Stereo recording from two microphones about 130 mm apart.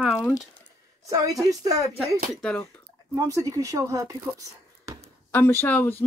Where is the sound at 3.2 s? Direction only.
25° right (ahead or behind).